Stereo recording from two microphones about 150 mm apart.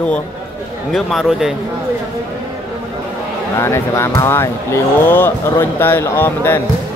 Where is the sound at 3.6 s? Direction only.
15° left (ahead or behind).